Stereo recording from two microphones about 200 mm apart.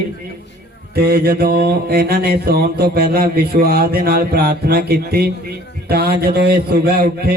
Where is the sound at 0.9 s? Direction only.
50° right (ahead or behind).